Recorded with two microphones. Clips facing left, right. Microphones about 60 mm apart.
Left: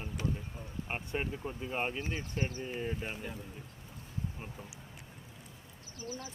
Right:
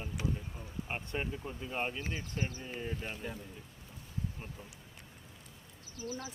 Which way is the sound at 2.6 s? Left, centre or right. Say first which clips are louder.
Left 3 dB; centre.